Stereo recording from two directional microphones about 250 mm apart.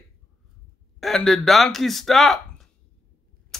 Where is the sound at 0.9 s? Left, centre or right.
Centre.